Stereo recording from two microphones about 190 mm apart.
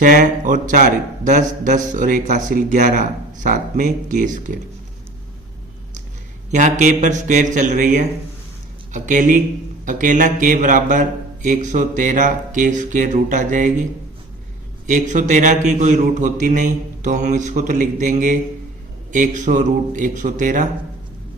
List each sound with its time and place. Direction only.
0.0 s a man's voice: 45° right (ahead or behind)
6.5 s a man's voice: 40° right (ahead or behind)
14.8 s a man's voice: 40° right (ahead or behind)